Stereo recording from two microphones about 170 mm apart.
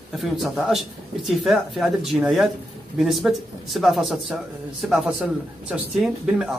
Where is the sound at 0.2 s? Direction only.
Centre (ahead or behind).